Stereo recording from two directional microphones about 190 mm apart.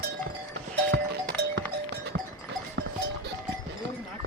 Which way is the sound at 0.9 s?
60° right (ahead or behind).